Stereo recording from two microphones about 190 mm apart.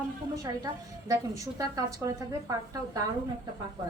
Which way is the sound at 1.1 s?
20° right (ahead or behind).